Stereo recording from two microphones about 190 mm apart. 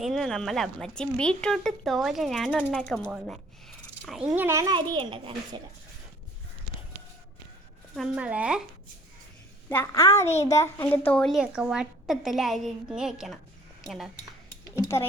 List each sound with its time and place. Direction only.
0.0 s speech: centre (ahead or behind)
4.3 s a child's voice: 15° right (ahead or behind)
7.9 s speech: 5° right (ahead or behind)
9.6 s a woman's voice: 15° left (ahead or behind); by 14.1 s centre (ahead or behind)
14.5 s a sound: 15° left (ahead or behind)